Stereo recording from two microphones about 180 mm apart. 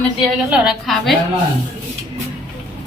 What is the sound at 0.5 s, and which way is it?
Speech, centre (ahead or behind).